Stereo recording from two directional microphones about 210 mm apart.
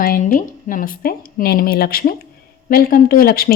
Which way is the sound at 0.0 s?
45° left (ahead or behind).